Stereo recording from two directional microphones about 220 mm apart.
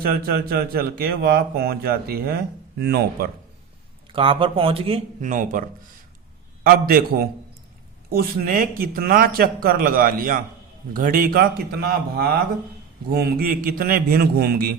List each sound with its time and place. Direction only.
0.0 s speech: 45° right (ahead or behind)
4.1 s speech: 25° right (ahead or behind)
6.7 s speech: 45° right (ahead or behind)